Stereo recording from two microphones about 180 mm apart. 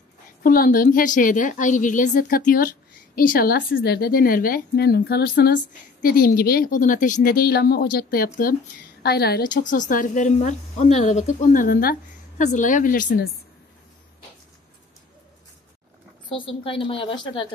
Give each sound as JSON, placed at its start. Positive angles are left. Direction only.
{"t": 0.4, "sound": "a woman's voice", "side_deg": 50}
{"t": 9.5, "sound": "a woman's voice", "side_deg": 45}
{"t": 16.3, "sound": "speech", "side_deg": 30}